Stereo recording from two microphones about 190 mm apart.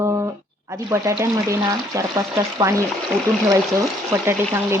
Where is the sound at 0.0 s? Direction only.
15° right (ahead or behind).